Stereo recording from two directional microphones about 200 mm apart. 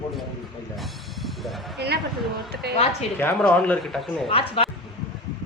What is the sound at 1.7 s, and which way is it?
A woman's voice, 55° right (ahead or behind).